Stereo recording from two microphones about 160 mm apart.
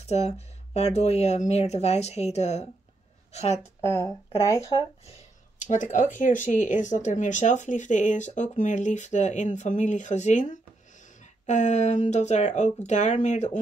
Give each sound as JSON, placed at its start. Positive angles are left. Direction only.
{"t": 0.0, "sound": "speech", "side_deg": 45}
{"t": 5.7, "sound": "speech", "side_deg": 50}